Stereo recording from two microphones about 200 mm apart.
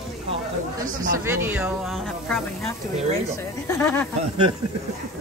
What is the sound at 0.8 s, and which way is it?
Speech, 45° right (ahead or behind).